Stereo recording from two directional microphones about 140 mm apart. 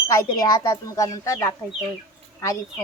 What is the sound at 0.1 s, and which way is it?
Speech, 30° left (ahead or behind).